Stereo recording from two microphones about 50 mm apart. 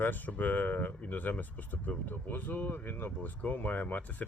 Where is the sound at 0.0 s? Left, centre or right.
Left.